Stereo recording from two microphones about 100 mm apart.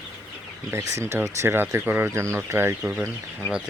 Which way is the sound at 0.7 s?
25° right (ahead or behind).